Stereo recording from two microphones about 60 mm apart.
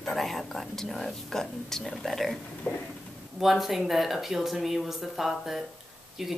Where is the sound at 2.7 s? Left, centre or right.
Left.